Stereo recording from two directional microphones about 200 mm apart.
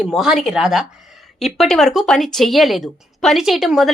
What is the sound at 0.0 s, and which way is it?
Speech, centre (ahead or behind).